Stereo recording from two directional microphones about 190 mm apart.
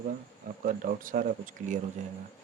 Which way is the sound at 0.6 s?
45° right (ahead or behind).